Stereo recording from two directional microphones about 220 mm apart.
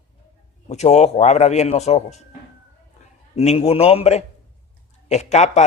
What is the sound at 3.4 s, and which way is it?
A man's voice, 30° left (ahead or behind).